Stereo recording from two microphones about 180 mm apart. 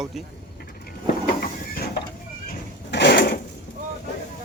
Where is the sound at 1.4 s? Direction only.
60° left (ahead or behind).